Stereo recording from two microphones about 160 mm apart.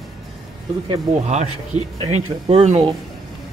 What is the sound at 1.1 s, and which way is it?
Speech, 45° right (ahead or behind).